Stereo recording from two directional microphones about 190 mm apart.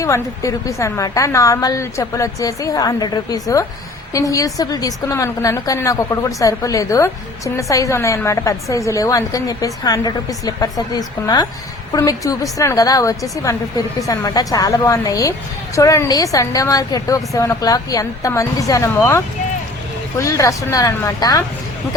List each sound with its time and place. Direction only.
0.0 s a woman's voice: 15° left (ahead or behind)